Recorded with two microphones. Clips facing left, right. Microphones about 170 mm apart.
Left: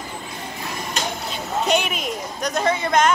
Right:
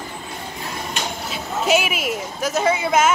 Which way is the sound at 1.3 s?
5° right (ahead or behind).